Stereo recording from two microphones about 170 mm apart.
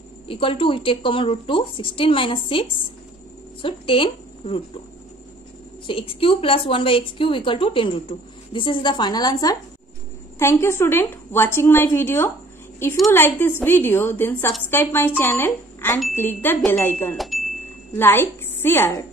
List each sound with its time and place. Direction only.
0.3 s a woman's voice: 30° left (ahead or behind)
5.9 s a woman's voice: 30° left (ahead or behind); by 17.2 s 10° left (ahead or behind)
17.2 s chime: centre (ahead or behind)
17.9 s a woman's voice: 15° left (ahead or behind)